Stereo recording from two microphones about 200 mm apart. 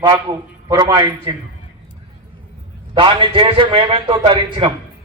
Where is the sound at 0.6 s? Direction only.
20° right (ahead or behind).